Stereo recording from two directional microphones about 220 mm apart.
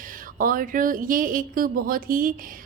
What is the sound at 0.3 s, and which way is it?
A woman's voice, 40° right (ahead or behind).